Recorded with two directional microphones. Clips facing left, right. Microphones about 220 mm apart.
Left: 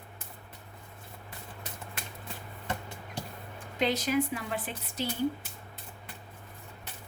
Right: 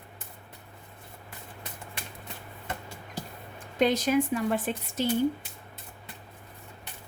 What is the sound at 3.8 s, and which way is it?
Speech, 45° right (ahead or behind).